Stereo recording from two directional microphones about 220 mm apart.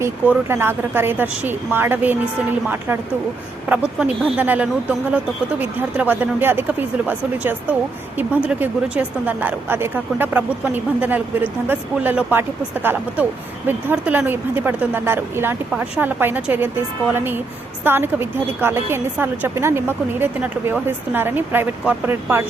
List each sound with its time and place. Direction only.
0.0 s speech: 10° right (ahead or behind)
3.7 s speech: 5° right (ahead or behind)